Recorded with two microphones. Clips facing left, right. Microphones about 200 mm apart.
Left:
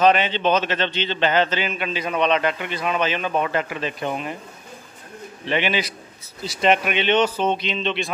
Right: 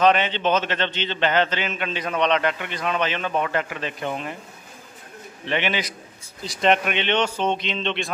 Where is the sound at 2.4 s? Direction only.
15° left (ahead or behind).